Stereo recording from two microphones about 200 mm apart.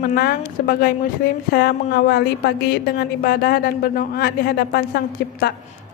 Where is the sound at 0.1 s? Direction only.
50° left (ahead or behind).